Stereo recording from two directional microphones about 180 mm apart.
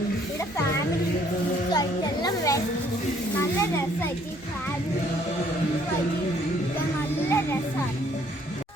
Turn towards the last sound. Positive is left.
turn(degrees=15)  # may be behind; listen again after turning